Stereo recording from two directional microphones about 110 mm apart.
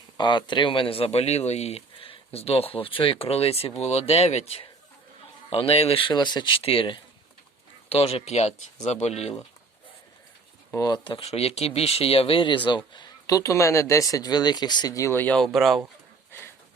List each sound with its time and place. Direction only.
0.2 s speech: 45° left (ahead or behind)
7.9 s speech: 65° left (ahead or behind)
10.7 s speech: 35° left (ahead or behind)
11.0 s speech: 50° left (ahead or behind)
11.3 s speech: 75° left (ahead or behind); by 15.4 s 20° left (ahead or behind)
15.5 s speech: centre (ahead or behind)